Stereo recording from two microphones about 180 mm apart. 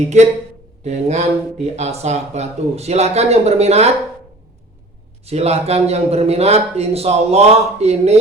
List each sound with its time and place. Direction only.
0.1 s a man's voice: 40° right (ahead or behind)
5.2 s a man's voice: 35° right (ahead or behind)